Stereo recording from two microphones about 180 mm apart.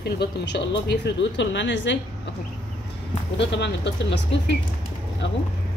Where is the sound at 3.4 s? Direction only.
75° left (ahead or behind).